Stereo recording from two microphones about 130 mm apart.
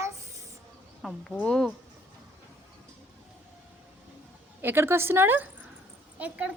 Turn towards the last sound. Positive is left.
turn(degrees=-10)  # may be behind; listen again after turning